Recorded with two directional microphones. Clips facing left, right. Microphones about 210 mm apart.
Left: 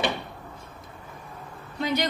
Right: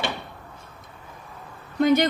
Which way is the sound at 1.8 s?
50° right (ahead or behind).